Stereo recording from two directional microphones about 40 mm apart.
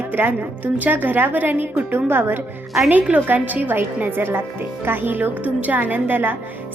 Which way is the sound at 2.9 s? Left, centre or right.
Right.